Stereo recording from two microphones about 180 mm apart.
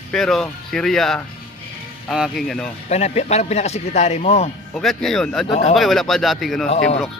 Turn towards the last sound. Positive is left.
turn(degrees=35)  # may be behind; listen again after turning